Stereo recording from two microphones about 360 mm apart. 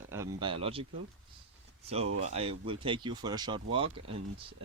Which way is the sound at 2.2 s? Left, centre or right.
Centre.